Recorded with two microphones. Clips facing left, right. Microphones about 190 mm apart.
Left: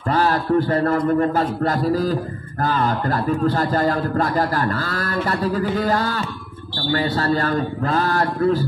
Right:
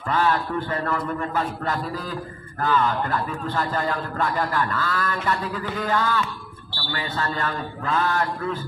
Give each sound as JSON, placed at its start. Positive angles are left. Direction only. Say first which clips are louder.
{"t": 0.1, "sound": "a man's voice", "louder": "left 5 dB", "side_deg": 35}